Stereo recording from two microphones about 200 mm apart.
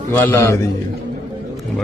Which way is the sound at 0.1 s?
10° left (ahead or behind).